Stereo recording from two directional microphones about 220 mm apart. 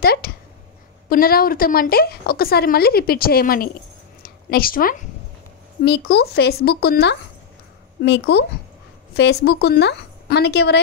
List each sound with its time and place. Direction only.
0.0 s speech: 45° left (ahead or behind)
4.2 s a sound: 40° left (ahead or behind)
5.9 s speech: 45° left (ahead or behind)